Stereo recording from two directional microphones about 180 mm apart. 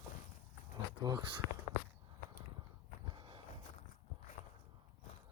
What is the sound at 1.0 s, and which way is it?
Speech, 25° right (ahead or behind).